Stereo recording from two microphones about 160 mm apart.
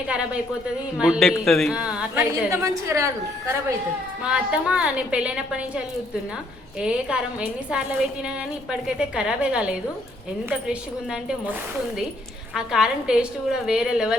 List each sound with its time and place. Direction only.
0.9 s a woman's voice: 5° right (ahead or behind)
2.3 s a woman's voice: 20° right (ahead or behind)
4.2 s a woman's voice: 5° right (ahead or behind)
12.5 s a woman's voice: 5° right (ahead or behind)